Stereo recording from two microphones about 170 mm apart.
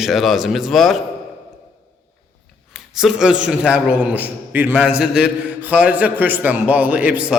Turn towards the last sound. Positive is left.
turn(degrees=-10)  # may be behind; listen again after turning